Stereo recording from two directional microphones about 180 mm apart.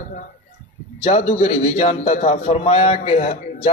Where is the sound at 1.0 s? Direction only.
35° left (ahead or behind).